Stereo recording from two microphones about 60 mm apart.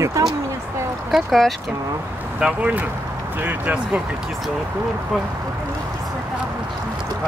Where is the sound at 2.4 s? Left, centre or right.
Centre.